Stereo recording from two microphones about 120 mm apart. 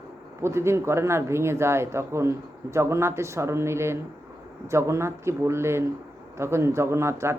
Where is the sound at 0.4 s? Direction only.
20° right (ahead or behind).